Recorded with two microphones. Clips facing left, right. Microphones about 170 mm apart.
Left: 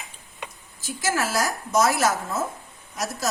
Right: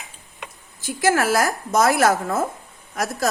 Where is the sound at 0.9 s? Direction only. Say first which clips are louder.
Right 7 dB; 60° right (ahead or behind).